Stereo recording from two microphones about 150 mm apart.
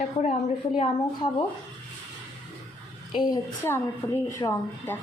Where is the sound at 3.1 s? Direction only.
25° left (ahead or behind).